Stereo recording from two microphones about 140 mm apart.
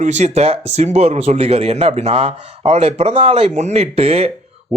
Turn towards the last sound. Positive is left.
turn(degrees=-45)  # may be behind; listen again after turning